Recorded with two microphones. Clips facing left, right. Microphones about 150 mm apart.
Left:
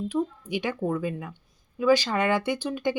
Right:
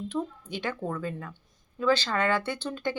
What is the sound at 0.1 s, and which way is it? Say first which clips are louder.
Speech: left 5 dB; 10° left (ahead or behind).